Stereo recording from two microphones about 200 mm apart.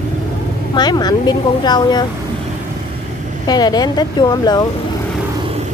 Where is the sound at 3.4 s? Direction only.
20° left (ahead or behind).